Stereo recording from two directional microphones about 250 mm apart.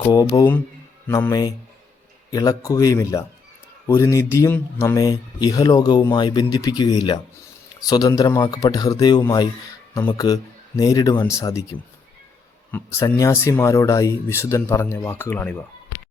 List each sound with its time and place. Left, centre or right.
0.0 s speech: centre
12.7 s speech: centre